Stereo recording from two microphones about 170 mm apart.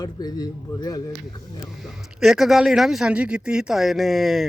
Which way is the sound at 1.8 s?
Centre (ahead or behind).